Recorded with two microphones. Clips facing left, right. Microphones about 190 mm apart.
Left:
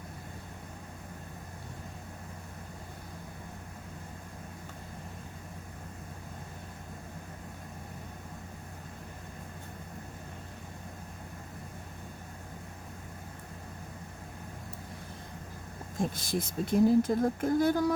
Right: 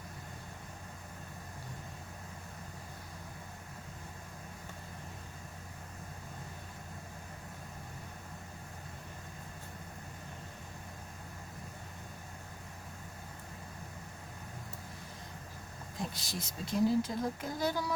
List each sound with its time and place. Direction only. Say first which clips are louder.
16.0 s speech: left 9 dB; 50° left (ahead or behind)